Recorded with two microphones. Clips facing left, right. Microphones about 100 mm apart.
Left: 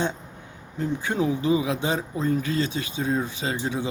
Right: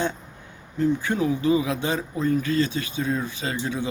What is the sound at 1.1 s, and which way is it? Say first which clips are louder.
A man's voice: left 3 dB; 20° left (ahead or behind).